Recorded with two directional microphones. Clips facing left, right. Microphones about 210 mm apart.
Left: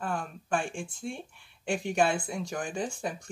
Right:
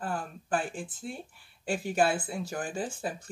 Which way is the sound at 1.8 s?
5° right (ahead or behind).